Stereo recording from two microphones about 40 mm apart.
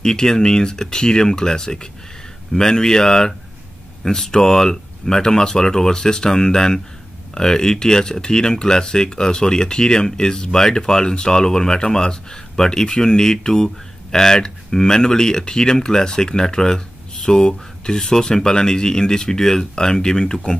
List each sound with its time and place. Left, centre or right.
0.0 s speech: centre